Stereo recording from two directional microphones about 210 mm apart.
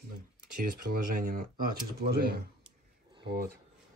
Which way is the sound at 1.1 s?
40° right (ahead or behind).